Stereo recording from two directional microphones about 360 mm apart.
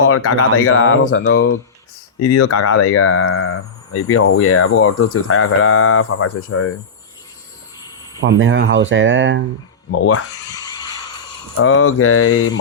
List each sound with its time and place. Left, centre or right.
0.1 s speech: left
8.2 s speech: right
10.2 s a sound: centre
11.5 s speech: left